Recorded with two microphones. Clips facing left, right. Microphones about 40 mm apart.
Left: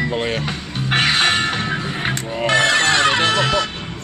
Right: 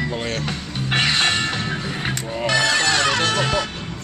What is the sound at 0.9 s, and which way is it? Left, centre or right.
Music, left.